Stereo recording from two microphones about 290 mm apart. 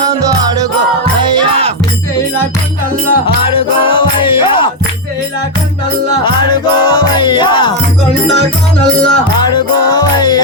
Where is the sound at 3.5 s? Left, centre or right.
Centre.